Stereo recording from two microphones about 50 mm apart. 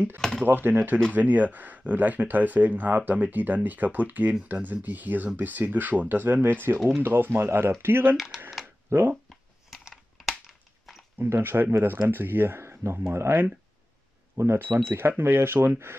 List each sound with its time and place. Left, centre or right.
0.2 s a sound: centre
0.5 s speech: right
7.8 s speech: right
8.9 s speech: right
9.3 s a sound: centre
11.3 s speech: right
14.3 s speech: right
14.6 s speech: right